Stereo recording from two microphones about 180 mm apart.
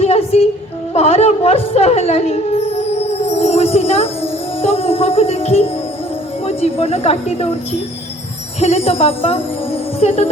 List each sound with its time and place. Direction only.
0.0 s female singing: 35° left (ahead or behind)
0.9 s a sound: 35° left (ahead or behind)
6.4 s a woman's voice: 35° left (ahead or behind)